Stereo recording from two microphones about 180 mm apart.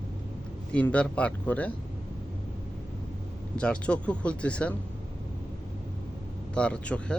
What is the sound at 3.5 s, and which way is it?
Speech, 5° left (ahead or behind).